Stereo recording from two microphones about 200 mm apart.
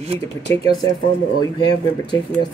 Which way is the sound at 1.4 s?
20° left (ahead or behind).